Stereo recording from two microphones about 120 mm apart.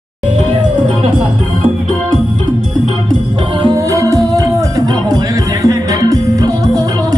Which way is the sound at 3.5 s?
40° right (ahead or behind).